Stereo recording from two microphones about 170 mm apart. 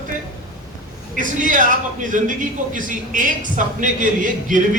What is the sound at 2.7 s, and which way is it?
A man's voice, 50° right (ahead or behind).